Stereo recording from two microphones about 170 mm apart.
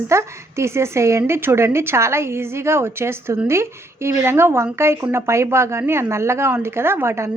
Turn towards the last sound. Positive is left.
turn(degrees=-15)  # may be behind; listen again after turning